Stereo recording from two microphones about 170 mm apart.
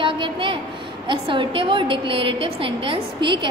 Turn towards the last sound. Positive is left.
turn(degrees=-30)  # may be behind; listen again after turning